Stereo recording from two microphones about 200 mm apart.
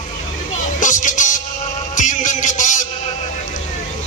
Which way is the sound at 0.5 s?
40° left (ahead or behind).